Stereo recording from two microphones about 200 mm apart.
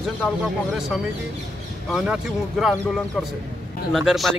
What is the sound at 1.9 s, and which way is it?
Speech, centre (ahead or behind).